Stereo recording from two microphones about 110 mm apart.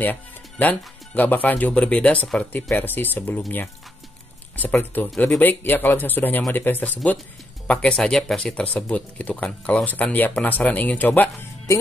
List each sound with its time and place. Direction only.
0.0 s speech: 15° left (ahead or behind)